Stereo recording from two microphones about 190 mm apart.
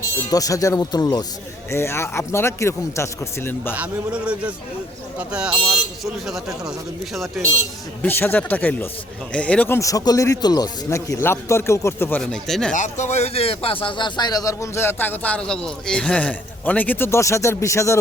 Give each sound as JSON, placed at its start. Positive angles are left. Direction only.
{"t": 0.3, "sound": "a man's voice", "side_deg": 20}
{"t": 3.8, "sound": "a man's voice", "side_deg": -5}
{"t": 8.0, "sound": "a man's voice", "side_deg": 10}
{"t": 12.7, "sound": "a man's voice", "side_deg": 40}